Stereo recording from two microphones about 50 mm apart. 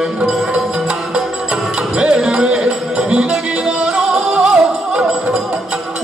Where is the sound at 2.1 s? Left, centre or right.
Centre.